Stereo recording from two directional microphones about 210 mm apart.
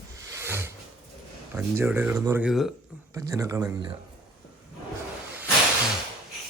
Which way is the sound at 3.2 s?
15° right (ahead or behind).